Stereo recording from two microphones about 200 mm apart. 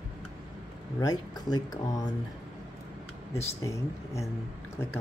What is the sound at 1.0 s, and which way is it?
Speech, 20° left (ahead or behind).